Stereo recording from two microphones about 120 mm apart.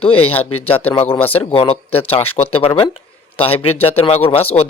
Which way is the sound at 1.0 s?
15° left (ahead or behind).